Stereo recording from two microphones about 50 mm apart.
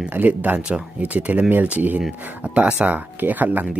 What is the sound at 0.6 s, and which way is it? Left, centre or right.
Speech, right.